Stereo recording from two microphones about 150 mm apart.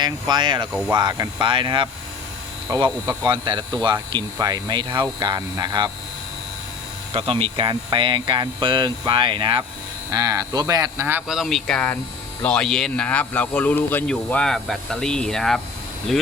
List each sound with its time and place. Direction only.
0.0 s speech: 30° right (ahead or behind)
7.1 s speech: 40° right (ahead or behind); by 11.0 s 25° right (ahead or behind)
11.0 s speech: 10° right (ahead or behind)
11.3 s speech: centre (ahead or behind)